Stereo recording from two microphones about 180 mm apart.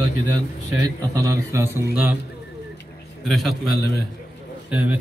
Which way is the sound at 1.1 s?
15° right (ahead or behind).